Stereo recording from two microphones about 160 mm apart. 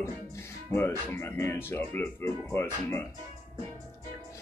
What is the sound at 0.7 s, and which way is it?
Speech, 15° left (ahead or behind).